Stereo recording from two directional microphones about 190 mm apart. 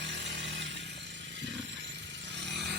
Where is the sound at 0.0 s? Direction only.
70° right (ahead or behind).